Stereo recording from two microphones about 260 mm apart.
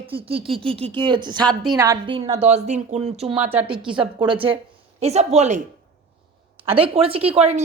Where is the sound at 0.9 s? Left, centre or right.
Centre.